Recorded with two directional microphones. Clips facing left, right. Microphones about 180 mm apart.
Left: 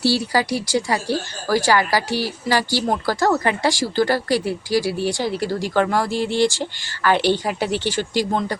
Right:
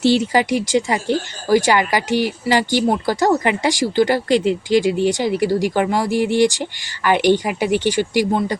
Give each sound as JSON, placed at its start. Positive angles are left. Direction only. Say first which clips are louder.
{"t": 0.0, "sound": "speech", "louder": "right 4 dB", "side_deg": -20}